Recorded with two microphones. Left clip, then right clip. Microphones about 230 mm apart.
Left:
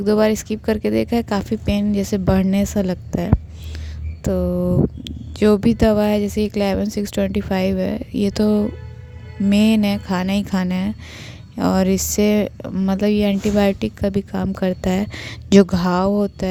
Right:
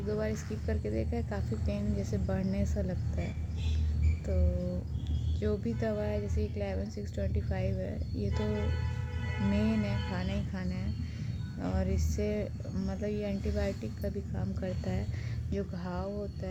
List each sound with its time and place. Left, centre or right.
0.0 s speech: left